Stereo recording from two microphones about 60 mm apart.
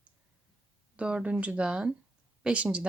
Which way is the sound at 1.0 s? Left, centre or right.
Centre.